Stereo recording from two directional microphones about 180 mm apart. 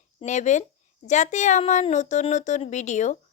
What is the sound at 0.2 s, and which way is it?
A woman's voice, 40° left (ahead or behind).